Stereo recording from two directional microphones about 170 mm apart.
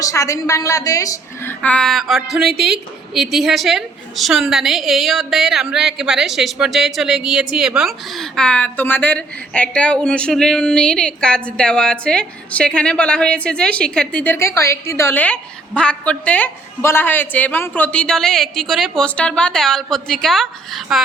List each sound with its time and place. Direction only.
0.0 s a woman's voice: 20° left (ahead or behind); by 21.0 s centre (ahead or behind)